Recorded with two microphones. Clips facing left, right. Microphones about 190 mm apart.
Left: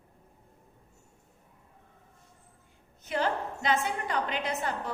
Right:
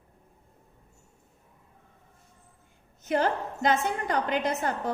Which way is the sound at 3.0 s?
45° right (ahead or behind).